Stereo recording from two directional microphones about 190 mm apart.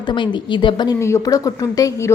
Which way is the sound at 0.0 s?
25° left (ahead or behind).